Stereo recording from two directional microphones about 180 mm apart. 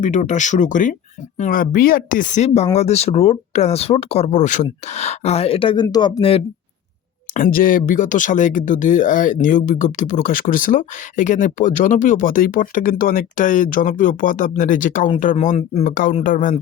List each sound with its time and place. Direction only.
0.0 s speech: 40° left (ahead or behind)
7.3 s speech: 50° left (ahead or behind)